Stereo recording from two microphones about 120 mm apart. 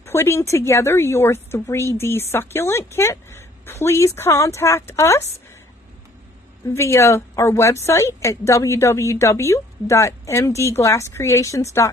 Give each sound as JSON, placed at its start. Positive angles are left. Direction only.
{"t": 0.0, "sound": "a woman's voice", "side_deg": 20}
{"t": 6.7, "sound": "a woman's voice", "side_deg": 25}